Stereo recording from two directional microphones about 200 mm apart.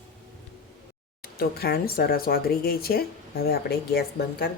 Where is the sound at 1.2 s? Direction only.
50° left (ahead or behind).